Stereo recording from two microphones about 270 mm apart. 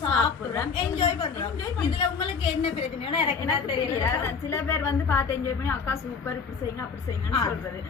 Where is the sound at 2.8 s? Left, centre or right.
Centre.